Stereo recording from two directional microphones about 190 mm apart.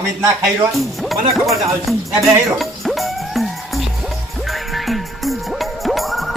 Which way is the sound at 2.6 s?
Centre (ahead or behind).